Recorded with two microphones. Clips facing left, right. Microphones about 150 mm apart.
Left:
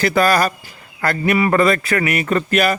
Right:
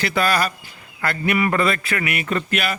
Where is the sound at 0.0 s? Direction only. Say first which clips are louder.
Left 5 dB; 45° left (ahead or behind).